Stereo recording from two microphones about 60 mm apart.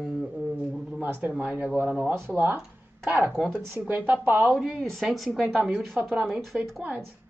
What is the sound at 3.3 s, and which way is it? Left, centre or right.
Speech, centre.